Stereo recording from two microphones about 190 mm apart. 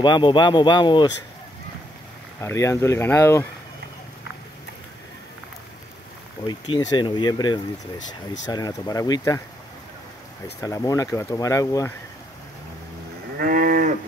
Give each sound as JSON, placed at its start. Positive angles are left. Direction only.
{"t": 0.0, "sound": "speech", "side_deg": 25}
{"t": 2.4, "sound": "speech", "side_deg": 15}
{"t": 6.4, "sound": "speech", "side_deg": 20}
{"t": 10.6, "sound": "speech", "side_deg": 15}
{"t": 13.4, "sound": "cattle", "side_deg": -45}